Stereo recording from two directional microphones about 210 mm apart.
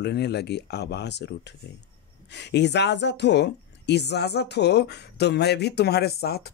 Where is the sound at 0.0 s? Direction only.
50° left (ahead or behind).